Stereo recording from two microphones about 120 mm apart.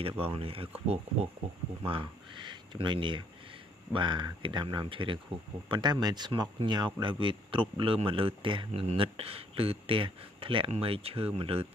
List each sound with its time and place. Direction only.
0.2 s speech: 50° right (ahead or behind)
1.9 s speech: 45° right (ahead or behind)